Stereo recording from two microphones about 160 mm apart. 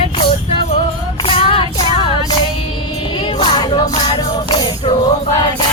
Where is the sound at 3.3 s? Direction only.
30° left (ahead or behind).